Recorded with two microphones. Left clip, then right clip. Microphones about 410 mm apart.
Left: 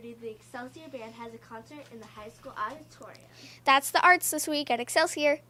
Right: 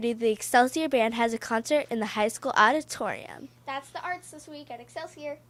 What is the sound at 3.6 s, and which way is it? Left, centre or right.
A woman's voice, left.